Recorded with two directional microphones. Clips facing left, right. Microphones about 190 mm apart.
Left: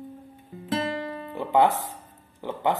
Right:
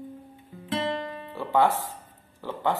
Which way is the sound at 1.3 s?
20° left (ahead or behind).